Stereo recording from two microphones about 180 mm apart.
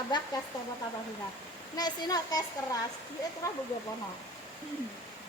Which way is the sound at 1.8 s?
20° left (ahead or behind).